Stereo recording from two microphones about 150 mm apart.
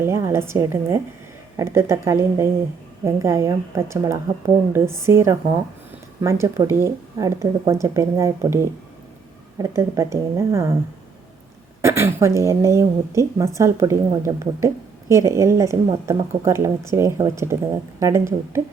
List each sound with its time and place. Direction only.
0.0 s a woman's voice: 20° right (ahead or behind)
11.8 s a woman's voice: 15° right (ahead or behind)